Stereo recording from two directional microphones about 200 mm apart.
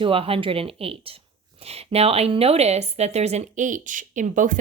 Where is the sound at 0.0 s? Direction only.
25° right (ahead or behind).